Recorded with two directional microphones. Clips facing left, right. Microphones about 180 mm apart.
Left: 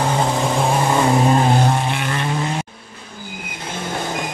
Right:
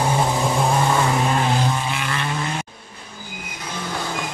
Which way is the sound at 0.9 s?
30° left (ahead or behind).